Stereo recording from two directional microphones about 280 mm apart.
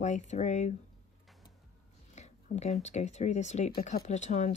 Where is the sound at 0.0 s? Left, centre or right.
Left.